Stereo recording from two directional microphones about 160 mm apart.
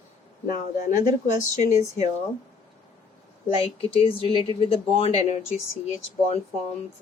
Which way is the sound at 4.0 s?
35° left (ahead or behind).